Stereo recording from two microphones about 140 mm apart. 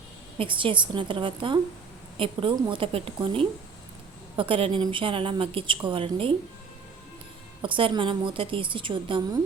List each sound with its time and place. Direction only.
0.3 s a woman's voice: 35° right (ahead or behind)
7.6 s a woman's voice: 40° right (ahead or behind)